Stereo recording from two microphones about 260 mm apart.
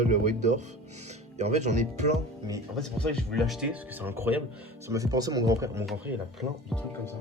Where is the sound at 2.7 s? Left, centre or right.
Centre.